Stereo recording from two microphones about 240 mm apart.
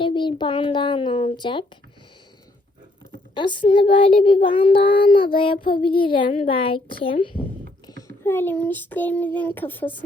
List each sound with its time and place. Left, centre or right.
0.0 s a child's voice: centre
3.3 s a child's voice: centre
7.9 s a sound: centre
8.2 s speech: centre